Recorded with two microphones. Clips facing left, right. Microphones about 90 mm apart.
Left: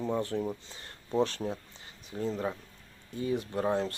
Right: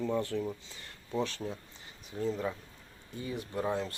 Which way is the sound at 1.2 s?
40° left (ahead or behind).